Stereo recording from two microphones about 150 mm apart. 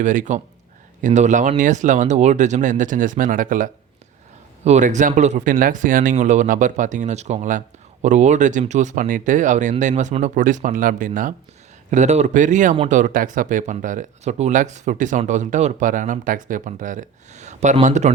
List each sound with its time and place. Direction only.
0.0 s speech: 60° right (ahead or behind)
4.6 s speech: 50° right (ahead or behind)